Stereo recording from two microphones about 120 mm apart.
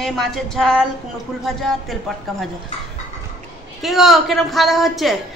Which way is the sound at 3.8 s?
Centre (ahead or behind).